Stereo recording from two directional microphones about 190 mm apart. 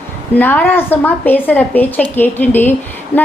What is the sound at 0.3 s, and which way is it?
A woman's voice, 10° left (ahead or behind).